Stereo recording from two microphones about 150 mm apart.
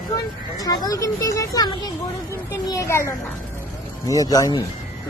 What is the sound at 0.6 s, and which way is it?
Speech, 25° left (ahead or behind).